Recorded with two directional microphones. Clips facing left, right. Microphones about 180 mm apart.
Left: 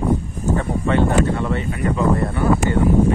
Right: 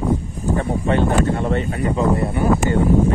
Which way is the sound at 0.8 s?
40° right (ahead or behind).